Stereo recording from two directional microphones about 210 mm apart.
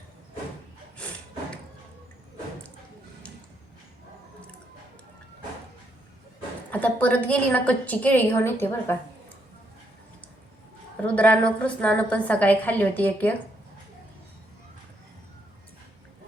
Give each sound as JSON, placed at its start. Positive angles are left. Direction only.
{"t": 6.7, "sound": "a woman's voice", "side_deg": 5}
{"t": 11.0, "sound": "a woman's voice", "side_deg": 5}